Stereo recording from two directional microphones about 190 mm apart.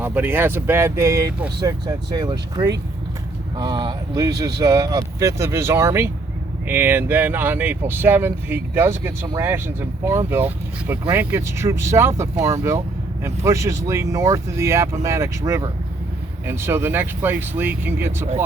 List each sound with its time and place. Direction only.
0.0 s speech: 10° right (ahead or behind)